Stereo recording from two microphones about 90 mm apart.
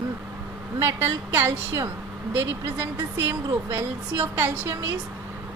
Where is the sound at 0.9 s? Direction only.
25° right (ahead or behind).